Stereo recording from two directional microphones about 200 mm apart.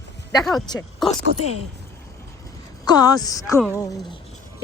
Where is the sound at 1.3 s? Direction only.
30° left (ahead or behind).